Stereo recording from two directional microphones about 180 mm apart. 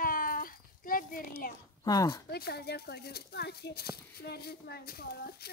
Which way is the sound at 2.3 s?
60° left (ahead or behind).